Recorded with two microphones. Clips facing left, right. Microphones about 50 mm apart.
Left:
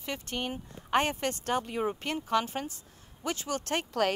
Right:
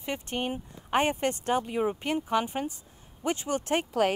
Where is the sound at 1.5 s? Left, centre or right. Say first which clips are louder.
Right 2 dB; centre.